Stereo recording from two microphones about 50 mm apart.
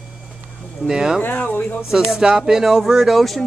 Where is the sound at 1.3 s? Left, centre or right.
Left.